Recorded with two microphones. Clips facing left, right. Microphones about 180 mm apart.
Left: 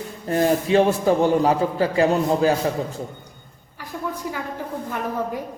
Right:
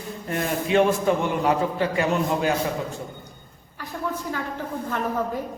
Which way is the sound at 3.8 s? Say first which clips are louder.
Even; 10° left (ahead or behind).